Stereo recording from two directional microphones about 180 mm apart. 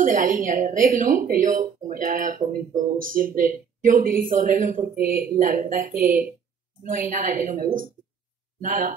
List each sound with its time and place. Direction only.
0.0 s speech: 50° right (ahead or behind)
5.0 s speech: 10° right (ahead or behind)
5.4 s speech: 50° right (ahead or behind)